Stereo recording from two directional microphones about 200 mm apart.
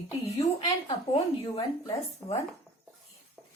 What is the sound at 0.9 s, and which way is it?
Speech, 25° left (ahead or behind).